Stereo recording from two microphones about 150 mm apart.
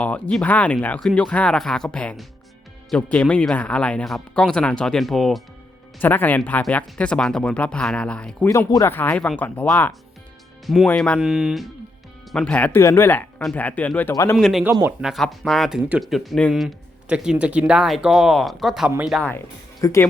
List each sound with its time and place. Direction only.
0.0 s speech: 5° left (ahead or behind)
6.0 s speech: 10° left (ahead or behind)
8.4 s speech: 20° left (ahead or behind)
14.3 s speech: centre (ahead or behind)
16.0 s speech: centre (ahead or behind)
18.9 s speech: 10° right (ahead or behind)
19.8 s speech: 20° left (ahead or behind)